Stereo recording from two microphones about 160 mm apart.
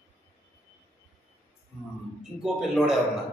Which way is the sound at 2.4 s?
5° right (ahead or behind).